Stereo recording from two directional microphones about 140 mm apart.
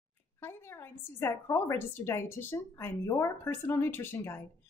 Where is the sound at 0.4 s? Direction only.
15° left (ahead or behind).